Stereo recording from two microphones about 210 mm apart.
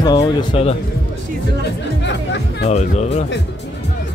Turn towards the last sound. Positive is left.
turn(degrees=30)  # may be behind; listen again after turning